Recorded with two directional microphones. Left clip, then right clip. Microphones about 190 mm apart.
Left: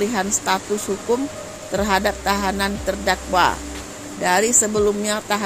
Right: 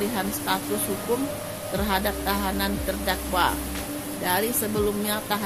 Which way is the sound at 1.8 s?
35° left (ahead or behind).